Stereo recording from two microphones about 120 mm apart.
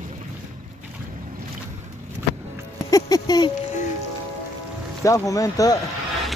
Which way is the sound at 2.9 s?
30° left (ahead or behind).